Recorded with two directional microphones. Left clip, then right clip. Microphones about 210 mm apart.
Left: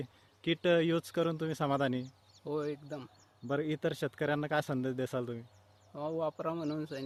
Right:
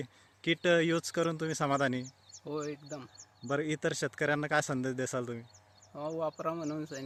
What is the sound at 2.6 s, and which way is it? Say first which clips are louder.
Speech: left 1 dB; 25° left (ahead or behind).